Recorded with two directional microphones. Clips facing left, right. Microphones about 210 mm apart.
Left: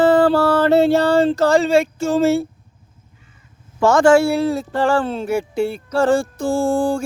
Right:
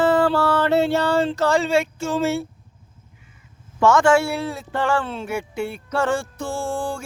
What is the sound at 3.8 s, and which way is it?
Speech, 35° left (ahead or behind).